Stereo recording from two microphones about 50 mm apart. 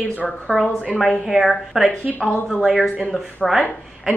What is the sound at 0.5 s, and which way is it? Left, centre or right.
Speech, centre.